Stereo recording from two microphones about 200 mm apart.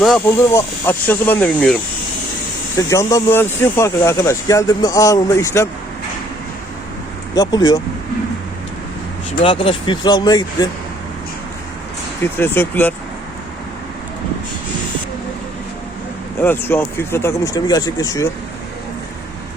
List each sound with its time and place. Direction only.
0.5 s speech: 10° left (ahead or behind)
7.3 s speech: 20° left (ahead or behind)
9.4 s speech: 25° left (ahead or behind)
12.2 s speech: 10° left (ahead or behind)
16.4 s speech: 10° left (ahead or behind)